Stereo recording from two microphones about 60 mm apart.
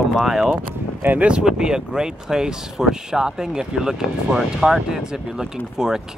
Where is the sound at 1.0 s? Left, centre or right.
Right.